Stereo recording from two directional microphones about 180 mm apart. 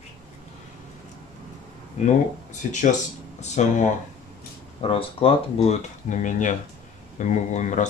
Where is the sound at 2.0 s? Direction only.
40° left (ahead or behind).